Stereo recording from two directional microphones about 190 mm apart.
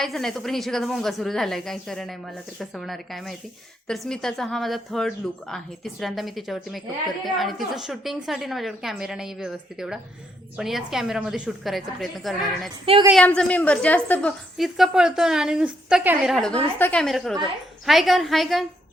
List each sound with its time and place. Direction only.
0.0 s a woman's voice: centre (ahead or behind)
12.8 s a woman's voice: 30° right (ahead or behind)
13.1 s a woman's voice: 5° left (ahead or behind)